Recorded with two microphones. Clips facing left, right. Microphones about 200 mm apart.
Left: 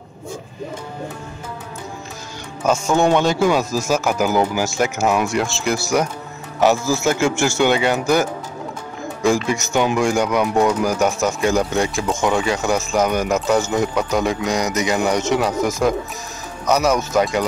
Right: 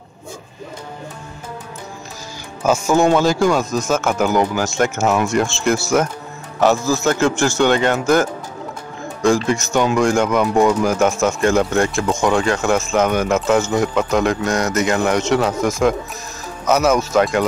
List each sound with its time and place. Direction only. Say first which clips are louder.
2.6 s speech: right 2 dB; 5° right (ahead or behind); by 5.3 s 10° left (ahead or behind)
5.3 s a man's voice: right 3 dB; centre (ahead or behind)
9.5 s speech: right 2 dB; 5° left (ahead or behind)